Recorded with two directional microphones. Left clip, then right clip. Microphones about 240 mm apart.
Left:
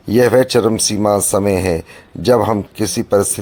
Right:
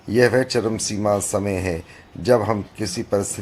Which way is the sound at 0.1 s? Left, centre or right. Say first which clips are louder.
Left 6 dB; left.